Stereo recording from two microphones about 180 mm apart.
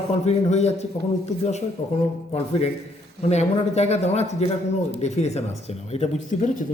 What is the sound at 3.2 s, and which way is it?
A man's voice, 35° left (ahead or behind).